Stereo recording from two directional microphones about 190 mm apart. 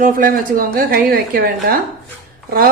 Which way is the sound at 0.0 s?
45° right (ahead or behind).